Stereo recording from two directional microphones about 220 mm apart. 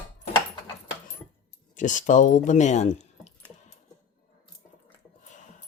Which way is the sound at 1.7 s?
35° left (ahead or behind).